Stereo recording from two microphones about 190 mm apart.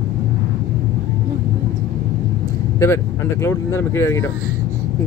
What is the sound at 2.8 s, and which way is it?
Speech, 15° left (ahead or behind).